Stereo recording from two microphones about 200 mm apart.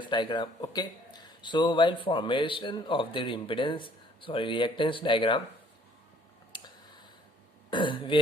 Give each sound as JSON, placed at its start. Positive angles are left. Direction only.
{"t": 0.0, "sound": "speech", "side_deg": 25}
{"t": 6.5, "sound": "a sound", "side_deg": 20}
{"t": 7.7, "sound": "speech", "side_deg": 25}